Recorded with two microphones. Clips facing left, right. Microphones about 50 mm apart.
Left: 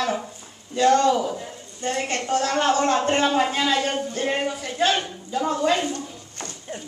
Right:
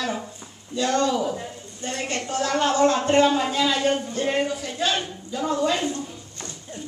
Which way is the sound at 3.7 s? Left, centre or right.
Centre.